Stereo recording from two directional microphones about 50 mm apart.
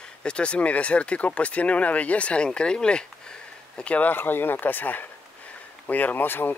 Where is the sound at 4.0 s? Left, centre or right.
Left.